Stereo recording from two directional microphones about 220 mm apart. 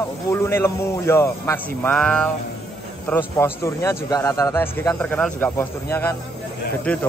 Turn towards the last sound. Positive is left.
turn(degrees=5)  # may be behind; listen again after turning